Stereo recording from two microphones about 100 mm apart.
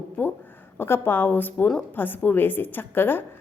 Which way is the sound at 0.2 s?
15° left (ahead or behind).